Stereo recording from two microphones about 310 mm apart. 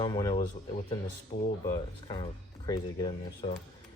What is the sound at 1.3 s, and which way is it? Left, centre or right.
Speech, left.